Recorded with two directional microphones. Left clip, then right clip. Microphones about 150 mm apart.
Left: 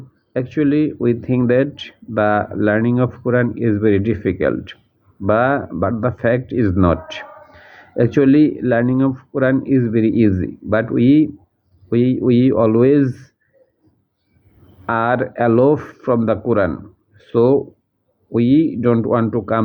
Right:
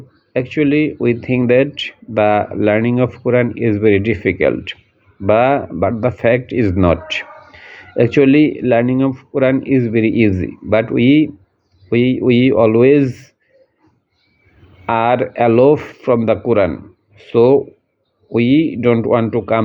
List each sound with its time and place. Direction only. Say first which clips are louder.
0.3 s speech: right 2 dB; 15° right (ahead or behind)
14.8 s speech: right 3 dB; 15° right (ahead or behind)